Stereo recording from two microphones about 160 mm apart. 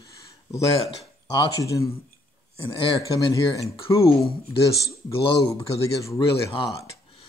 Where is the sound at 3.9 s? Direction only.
20° left (ahead or behind).